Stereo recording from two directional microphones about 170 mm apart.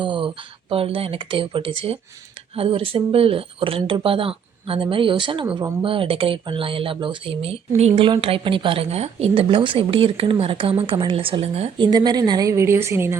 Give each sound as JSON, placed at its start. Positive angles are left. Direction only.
{"t": 0.0, "sound": "speech", "side_deg": -30}
{"t": 11.9, "sound": "a woman's voice", "side_deg": -25}